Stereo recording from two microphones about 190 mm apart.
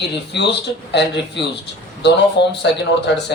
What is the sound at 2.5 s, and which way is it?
Speech, 65° left (ahead or behind).